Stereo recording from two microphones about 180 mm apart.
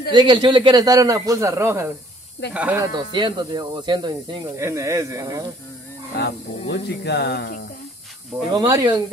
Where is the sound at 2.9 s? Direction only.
25° right (ahead or behind).